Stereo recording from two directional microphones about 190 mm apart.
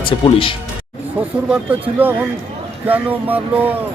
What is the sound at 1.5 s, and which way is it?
Speech, 10° right (ahead or behind).